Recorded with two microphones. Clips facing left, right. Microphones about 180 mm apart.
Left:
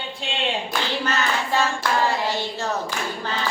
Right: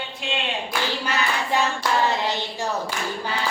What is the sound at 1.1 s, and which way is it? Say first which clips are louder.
Hands: even; 15° right (ahead or behind).